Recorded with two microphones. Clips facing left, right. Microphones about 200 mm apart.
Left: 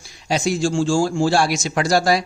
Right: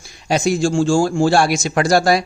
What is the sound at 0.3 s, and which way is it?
A man's voice, 50° right (ahead or behind).